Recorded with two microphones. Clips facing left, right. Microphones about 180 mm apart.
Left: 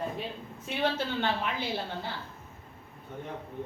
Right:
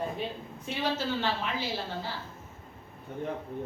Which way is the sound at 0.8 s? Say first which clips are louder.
Left 1 dB; 55° left (ahead or behind).